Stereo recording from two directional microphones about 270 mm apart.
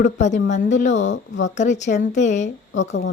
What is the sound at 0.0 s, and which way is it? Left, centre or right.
Speech, left.